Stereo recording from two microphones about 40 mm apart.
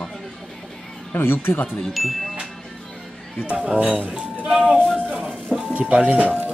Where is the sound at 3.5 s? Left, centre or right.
Right.